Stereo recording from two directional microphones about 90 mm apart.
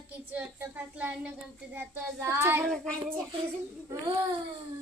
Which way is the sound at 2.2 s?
30° right (ahead or behind).